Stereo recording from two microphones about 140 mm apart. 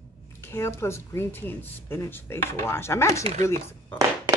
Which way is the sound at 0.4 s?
20° left (ahead or behind).